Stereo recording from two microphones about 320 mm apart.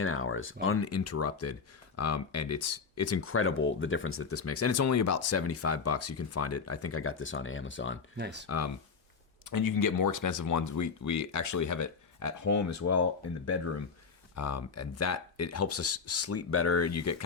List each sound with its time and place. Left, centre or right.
0.0 s speech: left
8.1 s speech: right
8.4 s speech: left
9.5 s speech: left